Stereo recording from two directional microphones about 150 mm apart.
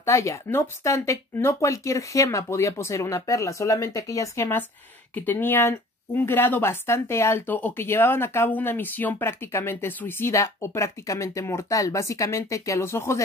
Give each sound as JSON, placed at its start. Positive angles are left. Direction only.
{"t": 0.0, "sound": "speech", "side_deg": 20}